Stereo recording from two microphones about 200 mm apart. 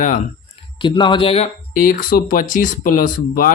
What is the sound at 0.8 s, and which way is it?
Speech, 25° left (ahead or behind).